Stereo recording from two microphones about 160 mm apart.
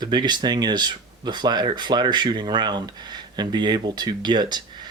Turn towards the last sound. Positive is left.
turn(degrees=-25)  # may be behind; listen again after turning